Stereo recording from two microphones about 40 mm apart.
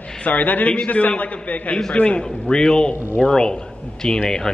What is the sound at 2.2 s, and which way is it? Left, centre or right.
A man's voice, centre.